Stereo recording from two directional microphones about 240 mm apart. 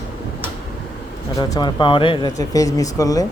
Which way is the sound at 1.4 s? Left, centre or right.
Centre.